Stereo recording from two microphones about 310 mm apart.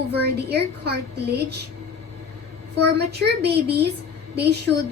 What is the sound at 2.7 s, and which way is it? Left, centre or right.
A woman's voice, right.